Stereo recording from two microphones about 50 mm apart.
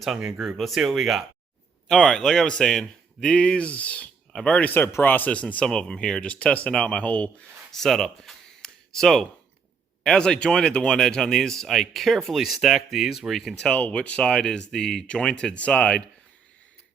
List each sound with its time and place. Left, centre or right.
0.3 s speech: centre
1.9 s a man's voice: centre
3.2 s speech: left
5.7 s speech: centre
6.3 s speech: left
7.7 s a sound: centre
10.0 s speech: centre
13.7 s speech: left